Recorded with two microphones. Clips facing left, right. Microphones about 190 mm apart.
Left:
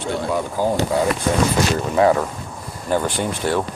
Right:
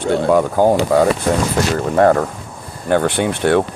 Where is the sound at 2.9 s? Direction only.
65° right (ahead or behind).